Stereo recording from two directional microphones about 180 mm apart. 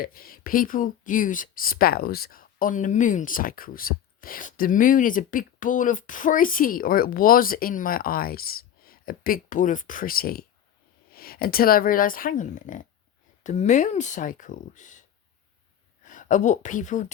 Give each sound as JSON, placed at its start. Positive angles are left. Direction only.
{"t": 0.0, "sound": "speech", "side_deg": 55}
{"t": 16.0, "sound": "speech", "side_deg": 45}